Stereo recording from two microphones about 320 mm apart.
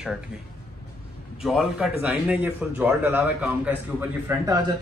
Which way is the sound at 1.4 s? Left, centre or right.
Centre.